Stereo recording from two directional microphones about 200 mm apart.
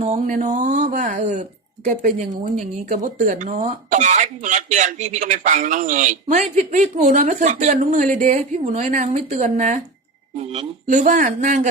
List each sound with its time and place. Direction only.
0.0 s speech: 40° right (ahead or behind)